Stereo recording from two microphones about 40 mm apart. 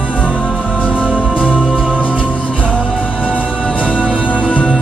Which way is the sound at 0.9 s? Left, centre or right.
Right.